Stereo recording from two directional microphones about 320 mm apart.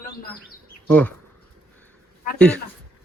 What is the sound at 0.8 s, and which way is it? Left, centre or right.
Speech, centre.